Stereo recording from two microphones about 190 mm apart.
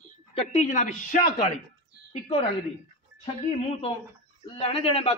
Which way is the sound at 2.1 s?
30° left (ahead or behind).